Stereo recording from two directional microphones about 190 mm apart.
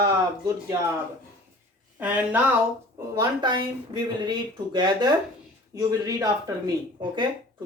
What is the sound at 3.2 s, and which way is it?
Speech, 25° right (ahead or behind).